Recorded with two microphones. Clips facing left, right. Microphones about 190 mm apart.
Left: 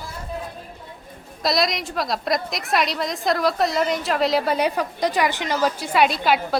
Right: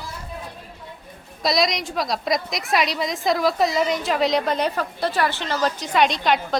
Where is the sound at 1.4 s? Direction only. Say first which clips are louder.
Right 1 dB; centre (ahead or behind).